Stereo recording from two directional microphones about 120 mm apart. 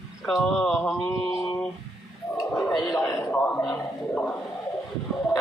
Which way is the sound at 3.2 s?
15° left (ahead or behind).